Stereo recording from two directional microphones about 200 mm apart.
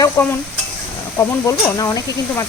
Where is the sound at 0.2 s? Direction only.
10° left (ahead or behind).